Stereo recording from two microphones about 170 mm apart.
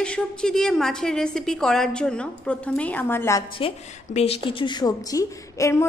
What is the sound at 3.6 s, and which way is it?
A woman's voice, 30° left (ahead or behind).